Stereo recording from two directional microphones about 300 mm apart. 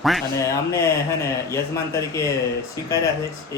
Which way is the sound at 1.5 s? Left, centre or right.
Centre.